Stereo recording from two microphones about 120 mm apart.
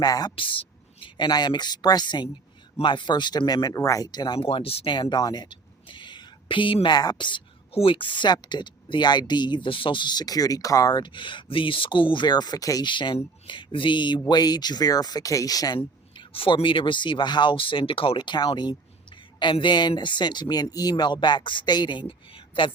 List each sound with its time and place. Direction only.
0.0 s a woman's voice: 35° left (ahead or behind)
4.4 s a woman's voice: 50° left (ahead or behind); by 15.8 s 30° left (ahead or behind)
15.8 s a woman's voice: 50° left (ahead or behind)